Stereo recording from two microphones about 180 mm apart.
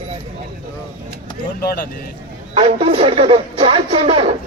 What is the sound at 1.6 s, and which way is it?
Speech, 55° left (ahead or behind).